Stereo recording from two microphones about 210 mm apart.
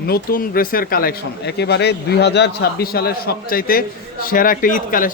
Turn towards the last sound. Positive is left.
turn(degrees=40)  # may be behind; listen again after turning